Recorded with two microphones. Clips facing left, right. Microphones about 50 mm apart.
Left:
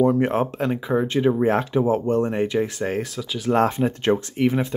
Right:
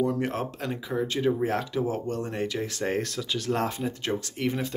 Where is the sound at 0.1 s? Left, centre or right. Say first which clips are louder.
Left 8 dB; left.